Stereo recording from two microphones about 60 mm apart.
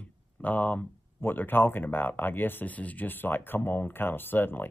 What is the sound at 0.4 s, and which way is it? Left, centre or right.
Speech, left.